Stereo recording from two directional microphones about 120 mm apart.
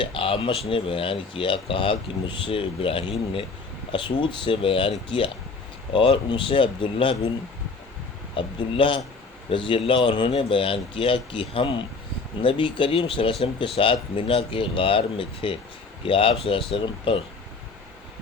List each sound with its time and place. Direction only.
0.0 s speech: 50° left (ahead or behind)
8.4 s speech: 45° left (ahead or behind)